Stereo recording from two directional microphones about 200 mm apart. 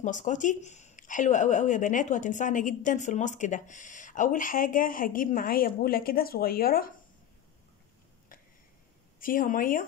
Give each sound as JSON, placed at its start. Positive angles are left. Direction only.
{"t": 0.0, "sound": "speech", "side_deg": 40}
{"t": 9.2, "sound": "speech", "side_deg": 45}